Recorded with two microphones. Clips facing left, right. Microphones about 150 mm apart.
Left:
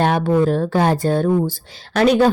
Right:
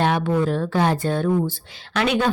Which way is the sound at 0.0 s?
45° left (ahead or behind).